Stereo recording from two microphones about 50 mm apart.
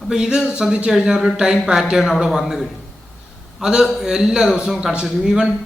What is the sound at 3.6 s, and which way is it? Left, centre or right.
A man's voice, centre.